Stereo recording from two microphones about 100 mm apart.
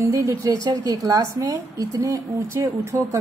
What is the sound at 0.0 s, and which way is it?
A woman's voice, 30° right (ahead or behind).